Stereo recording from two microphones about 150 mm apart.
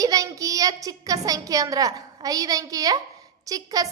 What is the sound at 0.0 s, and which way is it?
A woman's voice, 25° right (ahead or behind).